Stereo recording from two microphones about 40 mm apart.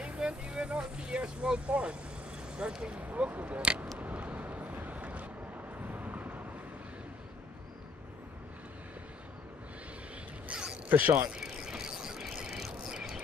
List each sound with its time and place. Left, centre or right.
0.0 s vehicle: right
1.7 s speech: right
3.0 s speech: right
4.0 s vehicle: right
10.5 s a sound: right
10.9 s speech: right
11.3 s mechanisms: centre
12.4 s a sound: centre